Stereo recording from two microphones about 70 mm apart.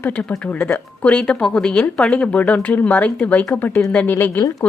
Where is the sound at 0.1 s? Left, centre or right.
Centre.